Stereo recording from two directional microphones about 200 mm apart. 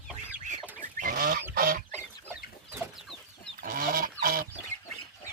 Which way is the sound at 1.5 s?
45° right (ahead or behind).